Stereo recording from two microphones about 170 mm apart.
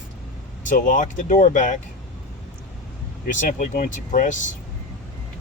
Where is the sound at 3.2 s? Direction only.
50° left (ahead or behind).